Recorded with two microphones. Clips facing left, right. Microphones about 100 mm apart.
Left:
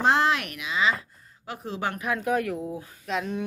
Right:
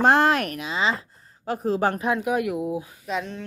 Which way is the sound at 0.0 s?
50° right (ahead or behind).